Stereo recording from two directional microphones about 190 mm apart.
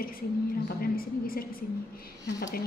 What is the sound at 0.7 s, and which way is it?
Speech, 50° left (ahead or behind).